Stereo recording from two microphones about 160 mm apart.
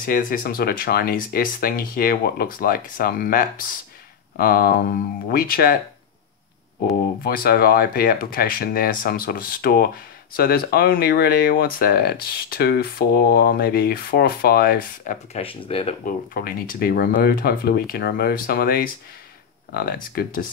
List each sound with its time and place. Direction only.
0.0 s speech: 60° left (ahead or behind)
7.2 s speech: 70° left (ahead or behind)
15.3 s speech: 35° left (ahead or behind)
16.0 s speech: 65° left (ahead or behind)